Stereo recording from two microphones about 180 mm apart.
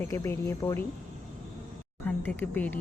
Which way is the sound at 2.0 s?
10° left (ahead or behind).